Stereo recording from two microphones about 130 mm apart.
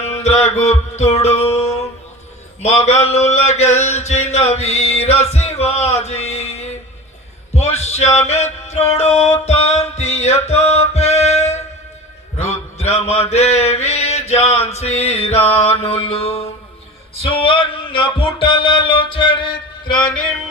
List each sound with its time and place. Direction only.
0.0 s music: 55° left (ahead or behind)
2.6 s a sound: 55° left (ahead or behind)
9.5 s music: 55° left (ahead or behind)
12.4 s mantra: 55° left (ahead or behind)
17.2 s music: 40° left (ahead or behind)